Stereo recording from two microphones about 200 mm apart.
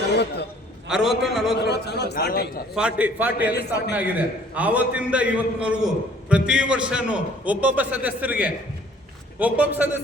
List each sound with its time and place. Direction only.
0.9 s a man's voice: centre (ahead or behind)
1.5 s a man's voice: 55° left (ahead or behind)
2.7 s a man's voice: 5° right (ahead or behind)
3.5 s a man's voice: 55° left (ahead or behind)
3.9 s a man's voice: 5° right (ahead or behind)